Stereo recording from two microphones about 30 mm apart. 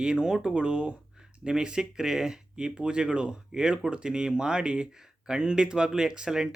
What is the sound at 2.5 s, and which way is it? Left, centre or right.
Speech, right.